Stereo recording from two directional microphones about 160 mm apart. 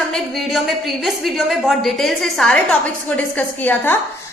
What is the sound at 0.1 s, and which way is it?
A woman's voice, centre (ahead or behind).